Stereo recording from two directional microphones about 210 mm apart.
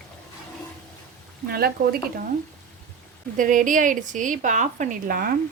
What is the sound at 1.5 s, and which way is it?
Speech, 45° right (ahead or behind).